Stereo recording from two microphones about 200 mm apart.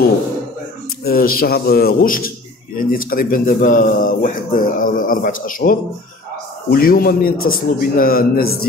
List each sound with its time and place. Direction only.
1.0 s speech: 45° left (ahead or behind)